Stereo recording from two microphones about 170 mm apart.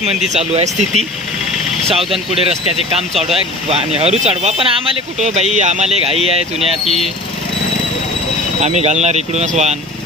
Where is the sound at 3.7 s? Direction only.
40° right (ahead or behind).